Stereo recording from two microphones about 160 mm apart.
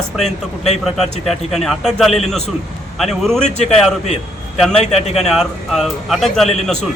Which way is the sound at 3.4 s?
45° left (ahead or behind).